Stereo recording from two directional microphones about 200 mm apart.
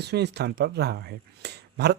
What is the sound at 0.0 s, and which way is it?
Speech, 55° right (ahead or behind).